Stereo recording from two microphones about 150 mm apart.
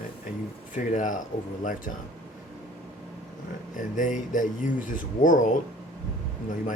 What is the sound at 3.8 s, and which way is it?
Speech, 60° left (ahead or behind).